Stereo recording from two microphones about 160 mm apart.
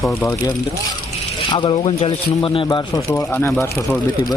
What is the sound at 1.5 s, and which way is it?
Speech, 30° left (ahead or behind).